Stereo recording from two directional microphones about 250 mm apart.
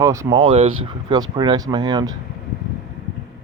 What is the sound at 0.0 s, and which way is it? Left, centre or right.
Speech, centre.